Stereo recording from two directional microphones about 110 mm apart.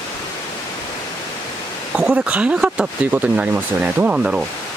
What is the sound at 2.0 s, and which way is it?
Speech, 10° right (ahead or behind).